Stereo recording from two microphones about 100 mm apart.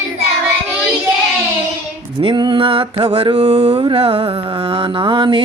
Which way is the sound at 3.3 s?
90° right.